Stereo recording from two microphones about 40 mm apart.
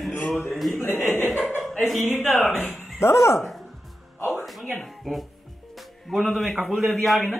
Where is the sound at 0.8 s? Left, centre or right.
Left.